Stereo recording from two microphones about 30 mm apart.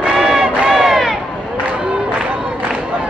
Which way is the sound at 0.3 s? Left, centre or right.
Centre.